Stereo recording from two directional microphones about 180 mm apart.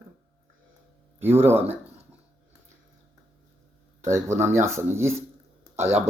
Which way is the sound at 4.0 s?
15° right (ahead or behind).